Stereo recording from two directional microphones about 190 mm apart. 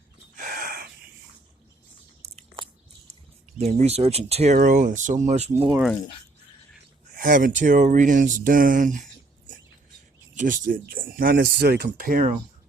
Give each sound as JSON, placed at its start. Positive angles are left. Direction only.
{"t": 0.3, "sound": "gasp", "side_deg": -45}
{"t": 2.2, "sound": "biting", "side_deg": -35}
{"t": 3.6, "sound": "speech", "side_deg": -35}
{"t": 7.2, "sound": "speech", "side_deg": -45}
{"t": 10.3, "sound": "speech", "side_deg": -45}